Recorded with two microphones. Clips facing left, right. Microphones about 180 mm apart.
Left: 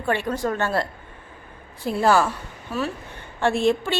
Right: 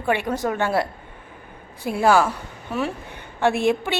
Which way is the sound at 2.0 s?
10° right (ahead or behind).